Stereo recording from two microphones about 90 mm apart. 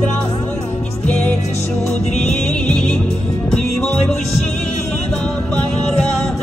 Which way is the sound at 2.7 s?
10° left (ahead or behind).